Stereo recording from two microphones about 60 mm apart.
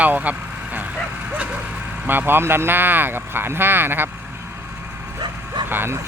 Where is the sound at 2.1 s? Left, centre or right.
Right.